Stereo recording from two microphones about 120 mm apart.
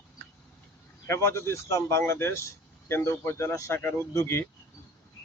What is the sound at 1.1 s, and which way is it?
Speech, 20° left (ahead or behind).